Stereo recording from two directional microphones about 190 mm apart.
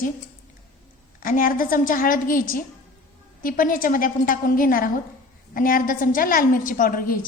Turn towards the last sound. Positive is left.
turn(degrees=50)  # may be behind; listen again after turning